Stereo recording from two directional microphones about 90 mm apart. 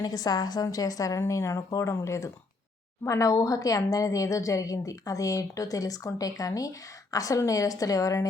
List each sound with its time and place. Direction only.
0.0 s a woman's voice: 45° left (ahead or behind)